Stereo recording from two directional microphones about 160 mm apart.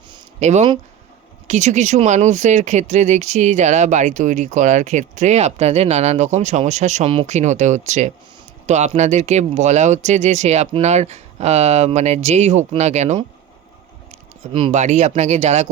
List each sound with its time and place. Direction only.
0.3 s speech: 45° right (ahead or behind)